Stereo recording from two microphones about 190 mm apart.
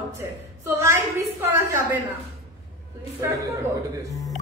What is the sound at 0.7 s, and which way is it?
A woman's voice, 15° right (ahead or behind).